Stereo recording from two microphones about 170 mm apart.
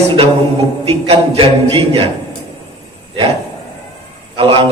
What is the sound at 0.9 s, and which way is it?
A man's voice, 35° right (ahead or behind).